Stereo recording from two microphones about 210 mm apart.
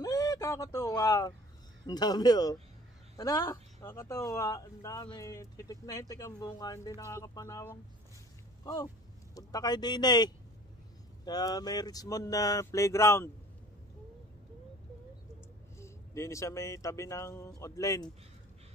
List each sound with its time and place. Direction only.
0.0 s a sound: 15° left (ahead or behind)
1.9 s speech: 20° left (ahead or behind)
15.8 s speech: 15° left (ahead or behind)